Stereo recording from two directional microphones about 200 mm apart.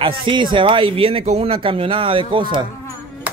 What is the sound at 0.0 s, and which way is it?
Speech, 25° right (ahead or behind).